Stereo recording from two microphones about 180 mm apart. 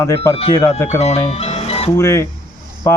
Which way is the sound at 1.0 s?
35° left (ahead or behind).